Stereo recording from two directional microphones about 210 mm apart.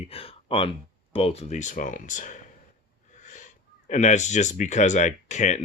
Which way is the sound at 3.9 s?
35° left (ahead or behind).